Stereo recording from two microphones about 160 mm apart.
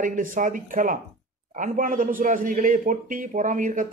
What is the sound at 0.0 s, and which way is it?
A man's voice, 55° right (ahead or behind).